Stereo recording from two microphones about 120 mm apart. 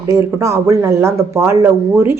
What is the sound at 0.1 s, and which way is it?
Speech, 25° right (ahead or behind).